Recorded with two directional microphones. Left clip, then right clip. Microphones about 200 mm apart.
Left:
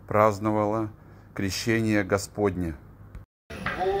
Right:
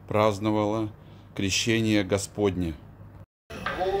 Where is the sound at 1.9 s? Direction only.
5° left (ahead or behind).